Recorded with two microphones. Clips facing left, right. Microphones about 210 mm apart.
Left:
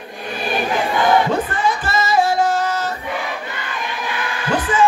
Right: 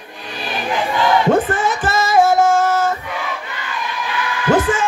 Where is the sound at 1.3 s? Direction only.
50° right (ahead or behind).